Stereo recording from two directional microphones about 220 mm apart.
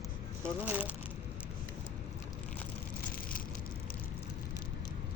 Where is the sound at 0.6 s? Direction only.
5° right (ahead or behind).